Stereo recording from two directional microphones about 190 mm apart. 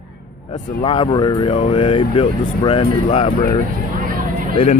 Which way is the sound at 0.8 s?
25° left (ahead or behind).